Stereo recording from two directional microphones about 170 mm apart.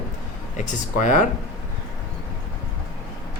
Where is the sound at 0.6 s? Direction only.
50° left (ahead or behind).